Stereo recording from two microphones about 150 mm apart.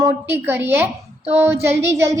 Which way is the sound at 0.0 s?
15° right (ahead or behind).